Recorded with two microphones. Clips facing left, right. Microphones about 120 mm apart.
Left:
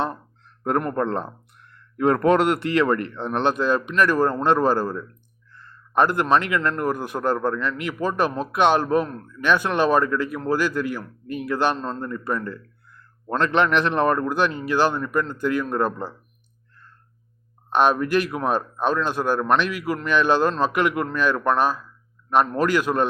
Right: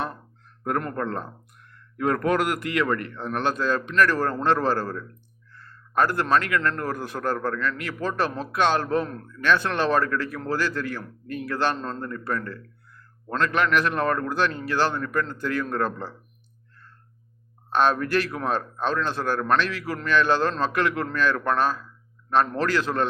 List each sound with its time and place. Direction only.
0.0 s a sound: 30° left (ahead or behind)
0.9 s a man's voice: 30° left (ahead or behind)
11.8 s a man's voice: 5° left (ahead or behind)
13.4 s speech: 25° left (ahead or behind)
17.7 s speech: 15° left (ahead or behind)